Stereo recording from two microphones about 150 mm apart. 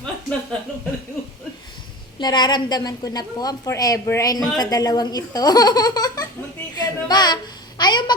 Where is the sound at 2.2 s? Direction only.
30° left (ahead or behind).